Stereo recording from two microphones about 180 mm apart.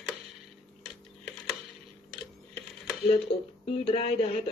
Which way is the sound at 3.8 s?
35° left (ahead or behind).